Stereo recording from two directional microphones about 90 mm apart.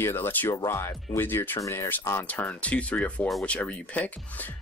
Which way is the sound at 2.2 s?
15° left (ahead or behind).